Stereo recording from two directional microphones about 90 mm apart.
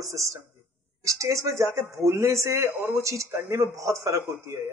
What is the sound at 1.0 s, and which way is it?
A man's voice, 35° right (ahead or behind).